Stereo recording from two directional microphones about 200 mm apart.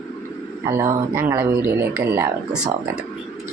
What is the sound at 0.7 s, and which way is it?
Speech, 15° right (ahead or behind).